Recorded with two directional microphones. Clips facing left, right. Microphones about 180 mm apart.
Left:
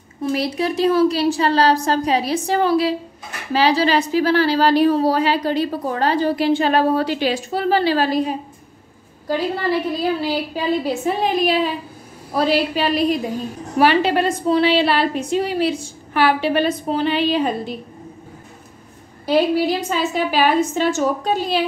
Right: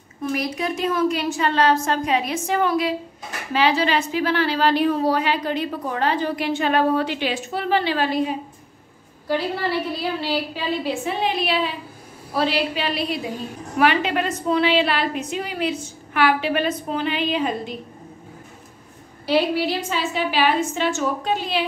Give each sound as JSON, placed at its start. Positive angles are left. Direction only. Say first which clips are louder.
{"t": 0.2, "sound": "a woman's voice", "louder": "left 4 dB", "side_deg": 30}
{"t": 10.2, "sound": "a woman's voice", "louder": "left 3 dB", "side_deg": 45}
{"t": 13.7, "sound": "a woman's voice", "louder": "left 4 dB", "side_deg": 35}
{"t": 19.2, "sound": "a woman's voice", "louder": "left 3 dB", "side_deg": 45}